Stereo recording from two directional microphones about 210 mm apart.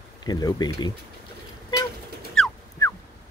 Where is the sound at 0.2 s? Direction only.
20° left (ahead or behind).